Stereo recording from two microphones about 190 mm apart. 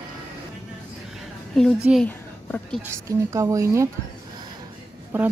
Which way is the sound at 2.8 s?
15° right (ahead or behind).